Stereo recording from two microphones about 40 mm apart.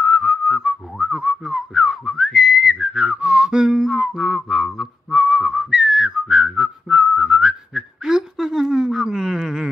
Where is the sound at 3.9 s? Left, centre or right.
Centre.